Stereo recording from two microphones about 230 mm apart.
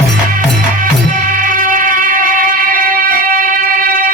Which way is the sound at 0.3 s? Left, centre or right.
Right.